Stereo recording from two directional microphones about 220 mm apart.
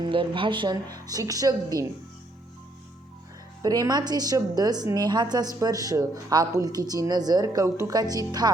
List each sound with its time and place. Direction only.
0.0 s a woman's voice: 20° right (ahead or behind)
3.6 s a woman's voice: 15° right (ahead or behind)